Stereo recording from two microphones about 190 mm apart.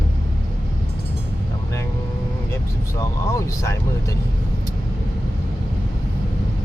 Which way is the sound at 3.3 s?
15° left (ahead or behind).